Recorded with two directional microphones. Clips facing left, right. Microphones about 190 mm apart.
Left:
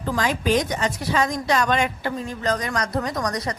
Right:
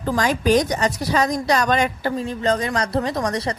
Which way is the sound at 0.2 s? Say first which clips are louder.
Right 4 dB; 40° right (ahead or behind).